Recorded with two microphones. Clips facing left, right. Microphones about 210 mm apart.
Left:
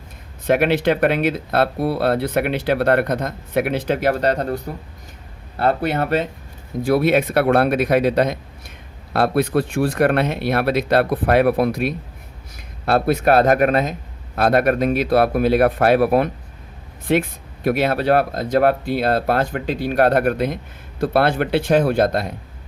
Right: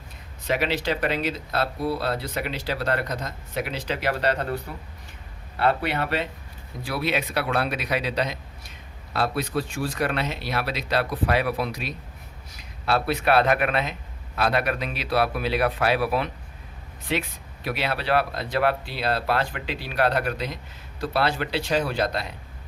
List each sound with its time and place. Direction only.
0.4 s speech: 55° left (ahead or behind)